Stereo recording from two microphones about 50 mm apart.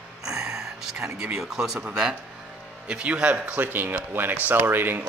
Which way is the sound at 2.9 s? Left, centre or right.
Right.